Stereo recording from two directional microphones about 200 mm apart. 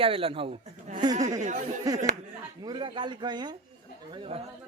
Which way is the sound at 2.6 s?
25° right (ahead or behind).